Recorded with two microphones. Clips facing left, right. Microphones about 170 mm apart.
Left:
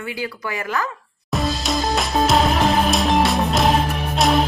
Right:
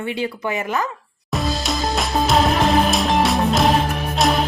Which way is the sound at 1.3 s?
Centre (ahead or behind).